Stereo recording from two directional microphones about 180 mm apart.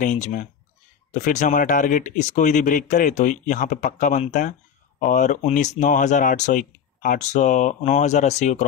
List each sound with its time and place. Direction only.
0.0 s speech: 45° left (ahead or behind)